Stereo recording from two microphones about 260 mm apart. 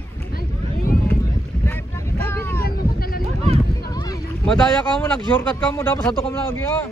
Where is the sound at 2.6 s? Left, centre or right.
Left.